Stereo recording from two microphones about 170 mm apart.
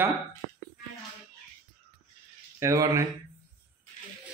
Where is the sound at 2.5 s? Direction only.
15° right (ahead or behind).